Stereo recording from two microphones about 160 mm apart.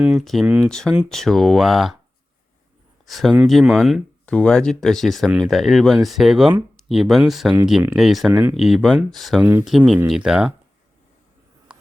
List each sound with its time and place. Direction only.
0.0 s speech: centre (ahead or behind)
3.1 s speech: centre (ahead or behind)
8.3 s speech: 15° right (ahead or behind)
8.5 s speech: centre (ahead or behind)
9.4 s speech: 15° right (ahead or behind)
9.6 s speech: centre (ahead or behind)